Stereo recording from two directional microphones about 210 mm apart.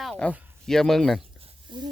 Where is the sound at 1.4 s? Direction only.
20° right (ahead or behind).